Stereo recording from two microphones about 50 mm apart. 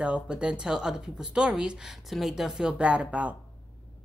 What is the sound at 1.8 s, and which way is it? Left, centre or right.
A woman's voice, centre.